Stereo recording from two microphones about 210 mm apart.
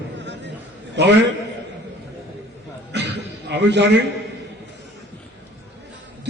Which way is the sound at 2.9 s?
55° right (ahead or behind).